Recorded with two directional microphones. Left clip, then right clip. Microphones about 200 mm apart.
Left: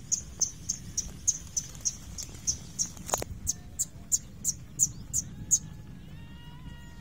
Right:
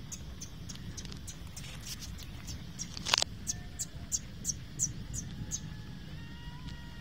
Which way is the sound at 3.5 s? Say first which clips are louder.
Left 5 dB; 60° left (ahead or behind).